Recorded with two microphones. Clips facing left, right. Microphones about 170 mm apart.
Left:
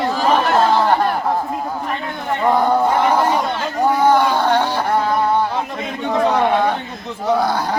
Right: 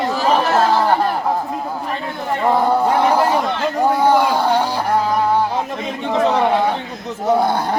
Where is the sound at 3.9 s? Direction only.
10° right (ahead or behind).